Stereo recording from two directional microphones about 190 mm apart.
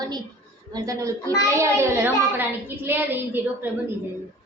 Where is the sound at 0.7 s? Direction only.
15° right (ahead or behind).